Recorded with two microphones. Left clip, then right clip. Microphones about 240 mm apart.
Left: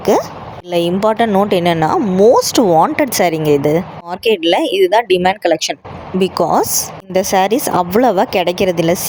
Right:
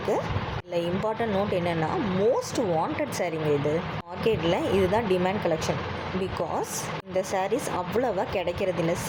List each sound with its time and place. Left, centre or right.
0.1 s speech: left